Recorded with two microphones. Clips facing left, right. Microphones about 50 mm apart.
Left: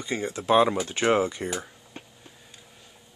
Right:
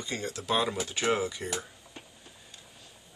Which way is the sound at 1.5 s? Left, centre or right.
Left.